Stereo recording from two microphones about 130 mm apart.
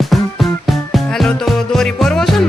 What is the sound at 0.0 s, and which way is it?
Music, centre (ahead or behind).